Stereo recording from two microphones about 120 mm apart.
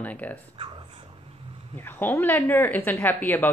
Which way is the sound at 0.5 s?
50° right (ahead or behind).